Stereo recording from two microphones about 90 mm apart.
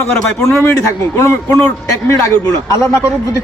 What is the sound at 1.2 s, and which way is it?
A man's voice, 30° left (ahead or behind).